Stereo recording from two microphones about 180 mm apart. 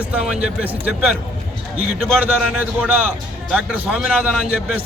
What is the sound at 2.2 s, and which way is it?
A man's voice, 5° right (ahead or behind).